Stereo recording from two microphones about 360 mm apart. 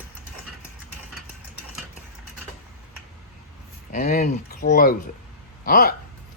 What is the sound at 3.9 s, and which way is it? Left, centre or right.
Speech, left.